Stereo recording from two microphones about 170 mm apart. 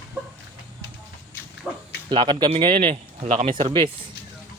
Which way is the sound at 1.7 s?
Centre (ahead or behind).